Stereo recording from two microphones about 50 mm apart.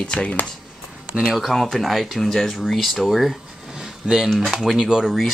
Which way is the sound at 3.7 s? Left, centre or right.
Centre.